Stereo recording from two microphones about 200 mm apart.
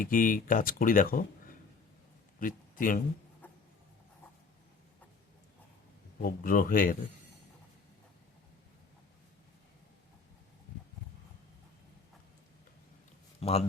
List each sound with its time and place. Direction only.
0.0 s speech: 45° left (ahead or behind)
3.4 s a sound: 10° left (ahead or behind)
6.2 s speech: 45° left (ahead or behind)
13.4 s a man's voice: 30° left (ahead or behind)